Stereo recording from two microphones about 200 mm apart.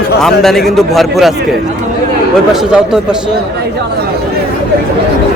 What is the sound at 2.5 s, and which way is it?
Speech, 5° right (ahead or behind).